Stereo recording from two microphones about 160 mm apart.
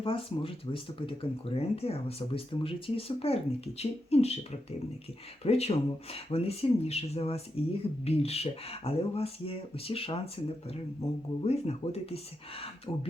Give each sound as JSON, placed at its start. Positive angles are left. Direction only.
{"t": 0.0, "sound": "speech", "side_deg": 35}
{"t": 5.4, "sound": "speech", "side_deg": 40}
{"t": 11.4, "sound": "speech", "side_deg": 40}
{"t": 12.9, "sound": "speech", "side_deg": 20}